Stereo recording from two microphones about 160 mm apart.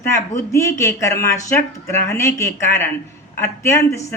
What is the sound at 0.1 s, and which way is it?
Speech, 15° left (ahead or behind).